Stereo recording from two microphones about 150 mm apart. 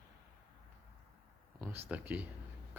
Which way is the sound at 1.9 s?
10° right (ahead or behind).